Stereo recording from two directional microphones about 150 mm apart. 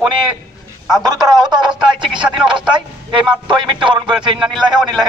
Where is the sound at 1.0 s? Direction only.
30° right (ahead or behind).